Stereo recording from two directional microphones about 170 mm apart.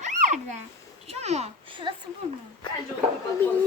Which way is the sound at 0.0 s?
45° right (ahead or behind).